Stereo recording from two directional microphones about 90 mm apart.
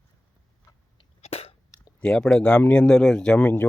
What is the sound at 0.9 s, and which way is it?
Cough, 90° left.